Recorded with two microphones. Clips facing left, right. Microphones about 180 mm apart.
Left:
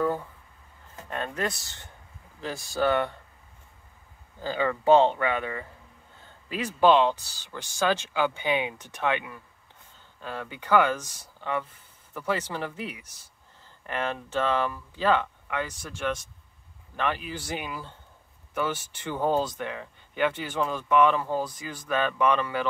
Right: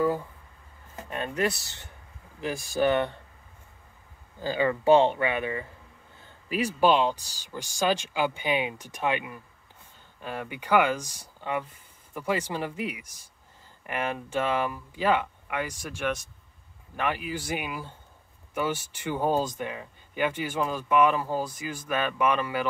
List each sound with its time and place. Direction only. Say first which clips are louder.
1.1 s speech: right 2 dB; 15° right (ahead or behind)
4.4 s speech: right 2 dB; 15° right (ahead or behind)